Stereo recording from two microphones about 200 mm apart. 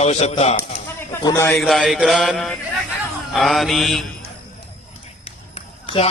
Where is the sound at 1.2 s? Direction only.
10° left (ahead or behind).